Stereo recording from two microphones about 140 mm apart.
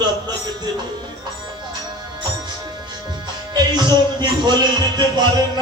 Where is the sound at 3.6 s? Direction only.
30° right (ahead or behind).